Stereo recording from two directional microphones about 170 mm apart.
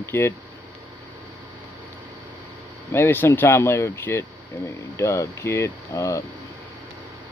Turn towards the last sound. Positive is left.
turn(degrees=15)  # may be behind; listen again after turning